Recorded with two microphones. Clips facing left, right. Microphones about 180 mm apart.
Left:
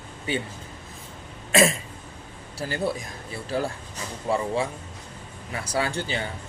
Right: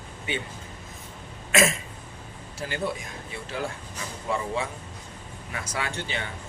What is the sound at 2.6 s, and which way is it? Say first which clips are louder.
Speech: left 3 dB; 35° left (ahead or behind).